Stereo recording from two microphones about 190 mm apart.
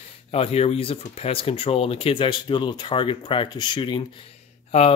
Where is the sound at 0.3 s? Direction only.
30° left (ahead or behind).